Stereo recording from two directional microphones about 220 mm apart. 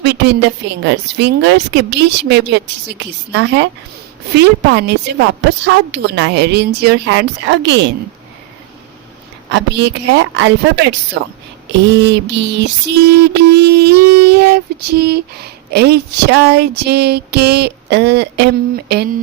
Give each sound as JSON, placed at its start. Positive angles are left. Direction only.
{"t": 0.0, "sound": "a sound", "side_deg": -50}
{"t": 0.9, "sound": "child singing", "side_deg": -50}
{"t": 9.5, "sound": "child singing", "side_deg": -50}